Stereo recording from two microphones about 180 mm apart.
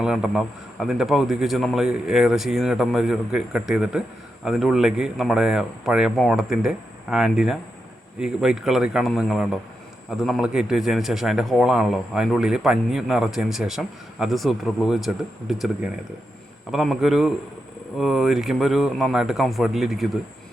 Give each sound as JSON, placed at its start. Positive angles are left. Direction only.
{"t": 0.0, "sound": "a man's voice", "side_deg": 0}